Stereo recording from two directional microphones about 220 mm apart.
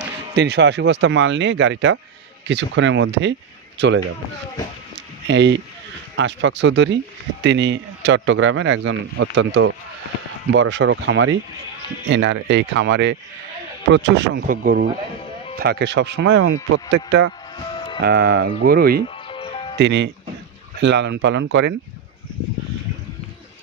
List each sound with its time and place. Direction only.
0.4 s speech: 50° right (ahead or behind)
5.2 s speech: 55° right (ahead or behind)
12.1 s speech: 55° right (ahead or behind)
17.6 s music: 20° left (ahead or behind)
18.0 s speech: 45° right (ahead or behind)
19.0 s music: 25° left (ahead or behind)
19.8 s speech: 55° right (ahead or behind)